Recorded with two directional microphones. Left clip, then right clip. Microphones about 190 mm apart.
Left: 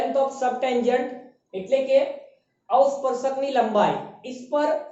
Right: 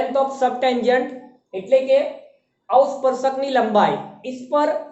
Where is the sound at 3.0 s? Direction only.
15° right (ahead or behind).